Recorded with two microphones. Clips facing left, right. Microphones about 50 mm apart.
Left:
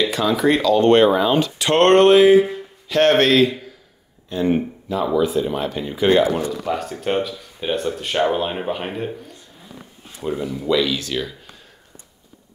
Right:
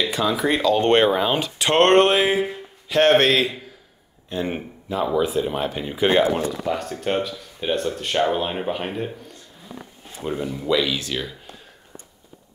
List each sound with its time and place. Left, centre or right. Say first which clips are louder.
0.0 s speech: left 3 dB; centre
0.6 s speech: left 3 dB; right
6.6 s speech: left 1 dB; centre
10.2 s speech: left 2 dB; centre